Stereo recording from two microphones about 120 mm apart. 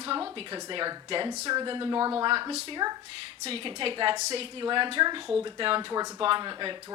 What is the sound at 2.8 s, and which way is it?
Speech, 30° right (ahead or behind).